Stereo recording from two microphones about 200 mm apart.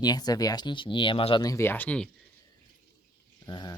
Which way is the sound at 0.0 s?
20° left (ahead or behind).